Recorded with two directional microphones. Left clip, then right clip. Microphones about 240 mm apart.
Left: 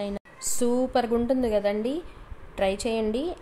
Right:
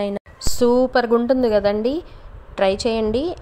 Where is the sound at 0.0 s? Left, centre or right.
Right.